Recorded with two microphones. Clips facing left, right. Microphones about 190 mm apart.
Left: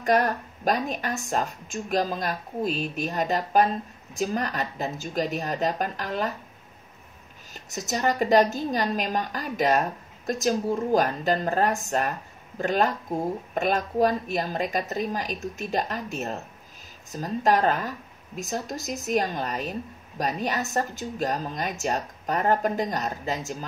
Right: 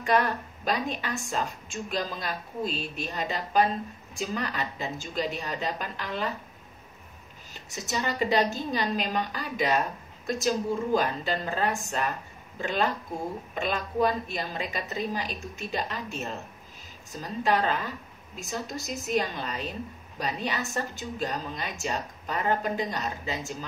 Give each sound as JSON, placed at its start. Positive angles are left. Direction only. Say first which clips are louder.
{"t": 0.0, "sound": "a woman's voice", "louder": "left 3 dB", "side_deg": 40}
{"t": 7.7, "sound": "a woman's voice", "louder": "left 5 dB", "side_deg": 45}